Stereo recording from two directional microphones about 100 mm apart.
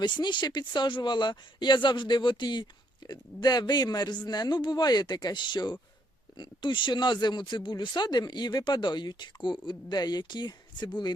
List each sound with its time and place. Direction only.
0.0 s speech: 50° left (ahead or behind)